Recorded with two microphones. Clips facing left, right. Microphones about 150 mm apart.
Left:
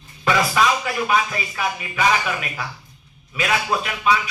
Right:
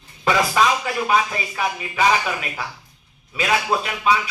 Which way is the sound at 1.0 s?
30° right (ahead or behind).